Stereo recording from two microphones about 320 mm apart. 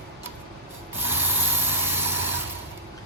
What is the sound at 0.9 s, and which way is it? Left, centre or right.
Rub, centre.